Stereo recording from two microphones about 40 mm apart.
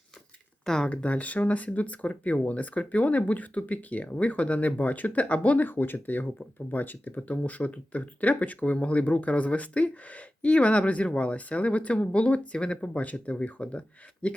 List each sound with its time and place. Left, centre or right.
0.6 s speech: centre
0.9 s speech: left
5.6 s speech: left